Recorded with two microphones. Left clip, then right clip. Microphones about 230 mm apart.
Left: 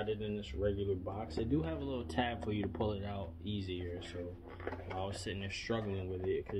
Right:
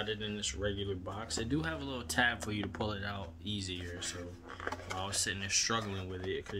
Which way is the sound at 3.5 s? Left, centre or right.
Centre.